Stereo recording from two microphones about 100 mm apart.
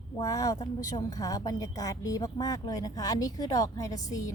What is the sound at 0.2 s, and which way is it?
A woman's voice, 35° left (ahead or behind).